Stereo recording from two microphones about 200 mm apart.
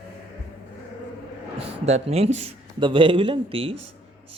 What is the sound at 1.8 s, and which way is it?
A man's voice, 30° right (ahead or behind).